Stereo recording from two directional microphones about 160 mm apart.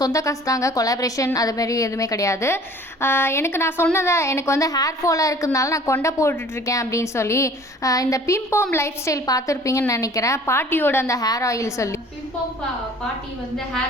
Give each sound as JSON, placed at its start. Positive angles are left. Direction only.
{"t": 0.0, "sound": "a woman's voice", "side_deg": 20}